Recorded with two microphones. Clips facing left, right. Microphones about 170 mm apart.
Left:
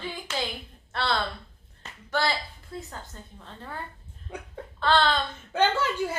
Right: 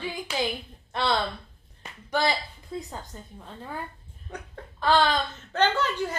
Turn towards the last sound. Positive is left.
turn(degrees=10)  # may be behind; listen again after turning